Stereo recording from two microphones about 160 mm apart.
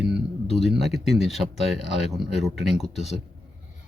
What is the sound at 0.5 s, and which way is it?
Speech, centre (ahead or behind).